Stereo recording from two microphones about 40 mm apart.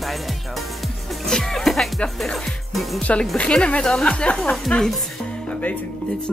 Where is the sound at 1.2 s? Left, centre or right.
Centre.